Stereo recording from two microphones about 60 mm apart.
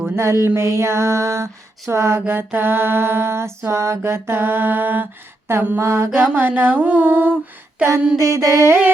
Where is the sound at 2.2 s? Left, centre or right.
Right.